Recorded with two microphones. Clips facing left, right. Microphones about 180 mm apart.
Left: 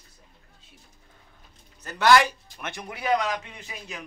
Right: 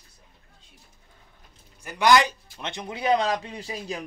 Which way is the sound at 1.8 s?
15° right (ahead or behind).